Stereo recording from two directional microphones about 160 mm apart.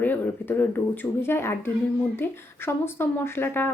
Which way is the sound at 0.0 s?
10° left (ahead or behind).